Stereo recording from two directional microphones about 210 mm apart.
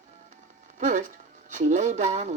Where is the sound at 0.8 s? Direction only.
35° right (ahead or behind).